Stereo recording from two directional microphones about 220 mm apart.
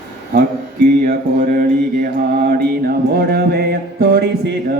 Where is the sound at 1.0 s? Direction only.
40° right (ahead or behind).